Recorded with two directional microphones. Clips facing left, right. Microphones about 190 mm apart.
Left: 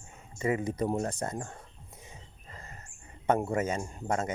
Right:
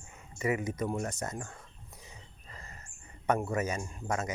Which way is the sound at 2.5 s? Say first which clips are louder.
Left 2 dB; 30° left (ahead or behind).